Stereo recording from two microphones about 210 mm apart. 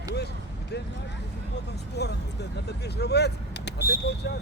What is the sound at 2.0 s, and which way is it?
Speech, 50° left (ahead or behind).